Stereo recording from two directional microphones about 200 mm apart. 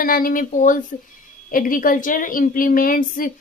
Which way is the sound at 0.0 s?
45° left (ahead or behind).